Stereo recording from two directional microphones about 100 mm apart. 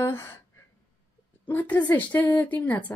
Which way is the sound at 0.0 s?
25° left (ahead or behind).